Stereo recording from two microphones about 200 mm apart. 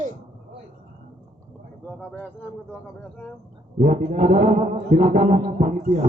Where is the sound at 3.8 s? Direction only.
35° right (ahead or behind).